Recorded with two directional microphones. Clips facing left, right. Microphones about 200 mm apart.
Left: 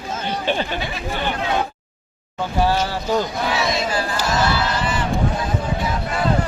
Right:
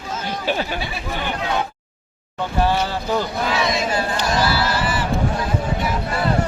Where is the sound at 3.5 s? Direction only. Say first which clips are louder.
Right 2 dB; 25° left (ahead or behind).